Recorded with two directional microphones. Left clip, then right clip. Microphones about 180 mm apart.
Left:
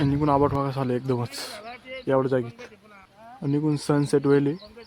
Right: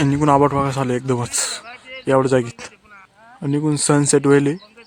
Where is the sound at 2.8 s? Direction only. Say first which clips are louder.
Right 3 dB; 50° left (ahead or behind).